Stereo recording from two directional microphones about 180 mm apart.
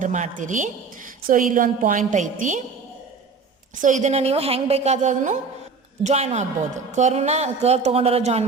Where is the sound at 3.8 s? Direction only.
45° right (ahead or behind).